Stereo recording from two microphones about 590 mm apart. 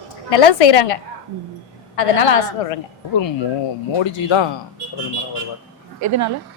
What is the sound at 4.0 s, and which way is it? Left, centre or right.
Speech, left.